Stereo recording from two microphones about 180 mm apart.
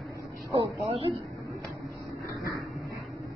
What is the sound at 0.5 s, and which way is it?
Speech, 35° right (ahead or behind).